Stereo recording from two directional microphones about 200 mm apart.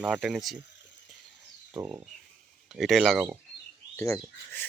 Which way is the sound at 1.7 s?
10° right (ahead or behind).